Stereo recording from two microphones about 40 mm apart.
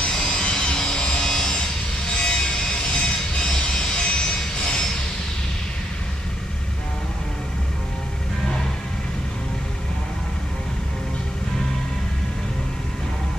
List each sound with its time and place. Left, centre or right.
0.0 s vehicle: centre
2.1 s music: centre
3.9 s vehicle: left